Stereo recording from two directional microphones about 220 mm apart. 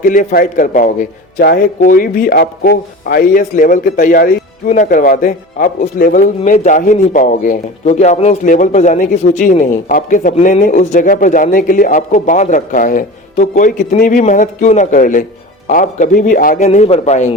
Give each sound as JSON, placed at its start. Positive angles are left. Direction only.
{"t": 0.0, "sound": "a man's voice", "side_deg": 40}